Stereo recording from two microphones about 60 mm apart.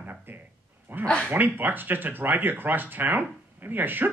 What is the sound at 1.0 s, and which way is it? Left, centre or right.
Speech, centre.